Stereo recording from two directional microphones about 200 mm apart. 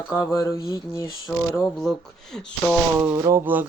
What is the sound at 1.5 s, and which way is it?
Speech, centre (ahead or behind).